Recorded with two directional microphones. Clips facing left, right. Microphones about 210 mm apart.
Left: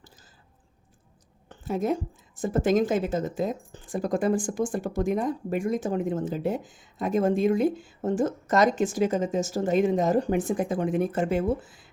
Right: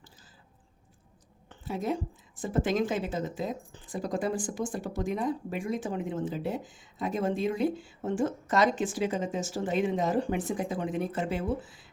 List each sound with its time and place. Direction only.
1.5 s a woman's voice: 45° left (ahead or behind)